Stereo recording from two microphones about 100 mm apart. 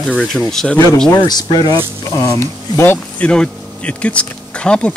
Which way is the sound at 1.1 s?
45° left (ahead or behind).